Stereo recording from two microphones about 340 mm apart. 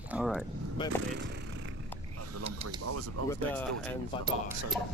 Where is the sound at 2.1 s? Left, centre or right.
Right.